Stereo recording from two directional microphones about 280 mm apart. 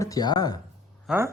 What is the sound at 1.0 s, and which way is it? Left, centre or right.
Speech, centre.